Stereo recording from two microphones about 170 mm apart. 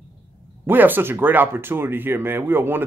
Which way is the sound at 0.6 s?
10° right (ahead or behind).